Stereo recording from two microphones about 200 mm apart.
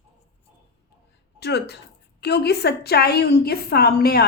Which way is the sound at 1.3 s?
55° left (ahead or behind).